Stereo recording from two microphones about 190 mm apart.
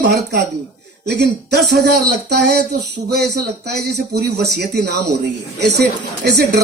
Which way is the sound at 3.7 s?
60° right (ahead or behind).